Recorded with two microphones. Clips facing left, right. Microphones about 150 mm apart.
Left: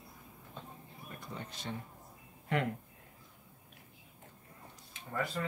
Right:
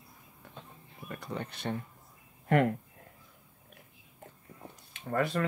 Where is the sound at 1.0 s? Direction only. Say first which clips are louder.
Right 7 dB; 70° right (ahead or behind).